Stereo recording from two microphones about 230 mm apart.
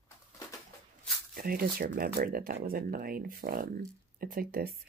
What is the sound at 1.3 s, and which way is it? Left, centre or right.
Speech, right.